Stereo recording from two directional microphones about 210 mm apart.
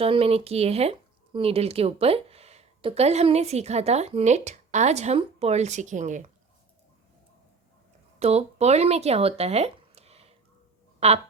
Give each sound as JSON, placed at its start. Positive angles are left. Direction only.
{"t": 0.0, "sound": "speech", "side_deg": -30}
{"t": 8.2, "sound": "speech", "side_deg": -30}